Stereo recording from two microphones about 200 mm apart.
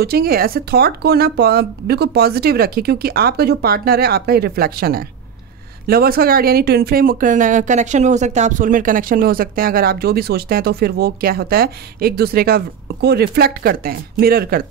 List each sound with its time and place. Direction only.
0.0 s speech: 50° right (ahead or behind)